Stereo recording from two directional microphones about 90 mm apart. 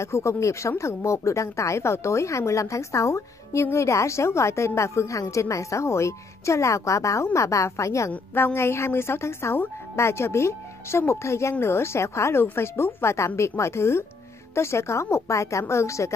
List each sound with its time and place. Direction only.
0.0 s a woman's voice: 30° left (ahead or behind)
8.1 s a woman's voice: 15° left (ahead or behind)
8.5 s a woman's voice: 30° left (ahead or behind)